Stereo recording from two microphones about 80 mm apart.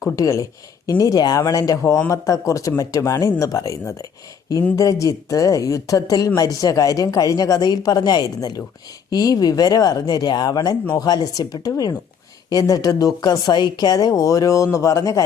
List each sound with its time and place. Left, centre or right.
0.0 s speech: left
1.8 s speech: left